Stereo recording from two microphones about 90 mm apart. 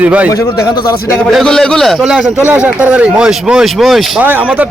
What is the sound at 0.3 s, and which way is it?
Speech, 40° left (ahead or behind).